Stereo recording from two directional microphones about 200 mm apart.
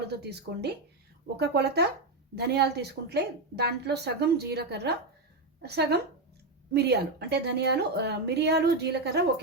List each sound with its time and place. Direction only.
0.1 s a woman's voice: 55° right (ahead or behind)